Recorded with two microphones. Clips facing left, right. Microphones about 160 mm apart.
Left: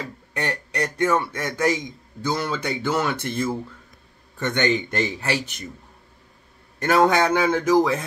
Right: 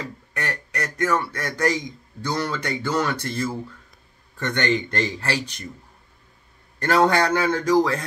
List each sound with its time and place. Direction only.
0.4 s a man's voice: 25° left (ahead or behind)
2.5 s speech: 10° left (ahead or behind)
7.1 s speech: 15° left (ahead or behind)